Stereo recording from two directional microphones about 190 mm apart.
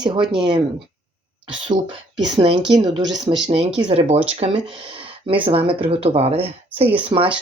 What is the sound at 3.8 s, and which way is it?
Speech, 30° right (ahead or behind).